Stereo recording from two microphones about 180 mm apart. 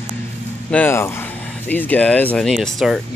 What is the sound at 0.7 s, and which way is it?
Speech, 10° left (ahead or behind).